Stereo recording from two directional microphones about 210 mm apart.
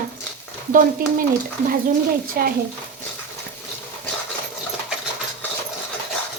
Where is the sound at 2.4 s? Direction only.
45° right (ahead or behind).